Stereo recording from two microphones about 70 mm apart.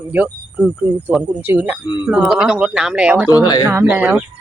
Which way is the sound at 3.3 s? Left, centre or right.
Left.